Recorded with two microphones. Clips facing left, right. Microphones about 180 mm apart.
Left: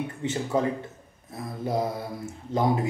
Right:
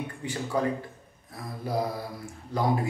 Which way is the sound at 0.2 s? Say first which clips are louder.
Left 2 dB; 25° left (ahead or behind).